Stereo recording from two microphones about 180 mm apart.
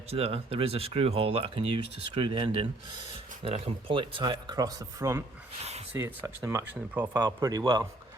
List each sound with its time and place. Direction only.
0.1 s speech: 35° right (ahead or behind)